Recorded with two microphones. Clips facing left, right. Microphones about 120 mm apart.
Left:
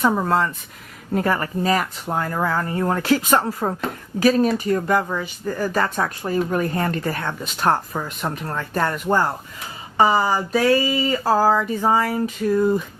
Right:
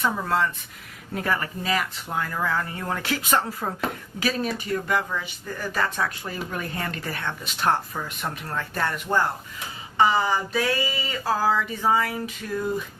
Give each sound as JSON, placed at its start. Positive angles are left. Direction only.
{"t": 0.0, "sound": "speech", "side_deg": 40}